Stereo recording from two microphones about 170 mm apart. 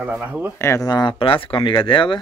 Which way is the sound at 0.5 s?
15° left (ahead or behind).